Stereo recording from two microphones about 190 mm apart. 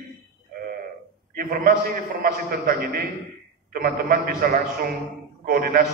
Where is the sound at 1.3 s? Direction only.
50° right (ahead or behind).